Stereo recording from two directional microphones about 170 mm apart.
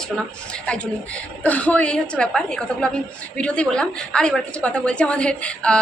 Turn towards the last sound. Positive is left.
turn(degrees=5)  # may be behind; listen again after turning